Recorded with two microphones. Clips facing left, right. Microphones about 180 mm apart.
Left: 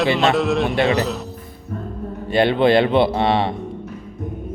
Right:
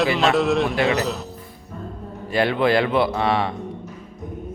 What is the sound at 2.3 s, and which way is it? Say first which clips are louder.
A man's voice: left 4 dB; 25° left (ahead or behind).